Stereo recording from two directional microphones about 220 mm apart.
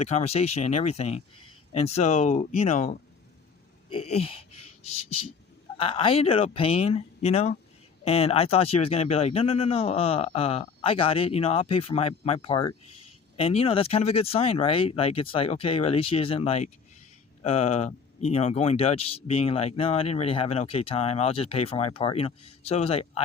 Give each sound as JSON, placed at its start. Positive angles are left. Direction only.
{"t": 0.0, "sound": "speech", "side_deg": 30}